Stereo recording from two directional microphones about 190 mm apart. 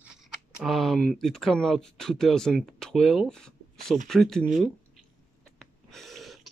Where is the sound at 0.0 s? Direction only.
5° right (ahead or behind).